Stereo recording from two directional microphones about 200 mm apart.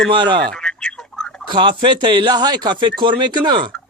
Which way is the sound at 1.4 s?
25° right (ahead or behind).